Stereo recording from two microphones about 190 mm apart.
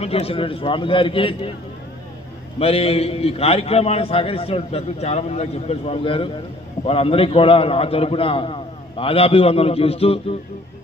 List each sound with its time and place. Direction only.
0.0 s a man's voice: 30° left (ahead or behind)
2.6 s a man's voice: 30° left (ahead or behind)